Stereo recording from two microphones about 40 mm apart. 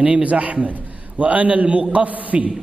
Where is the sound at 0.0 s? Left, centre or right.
Right.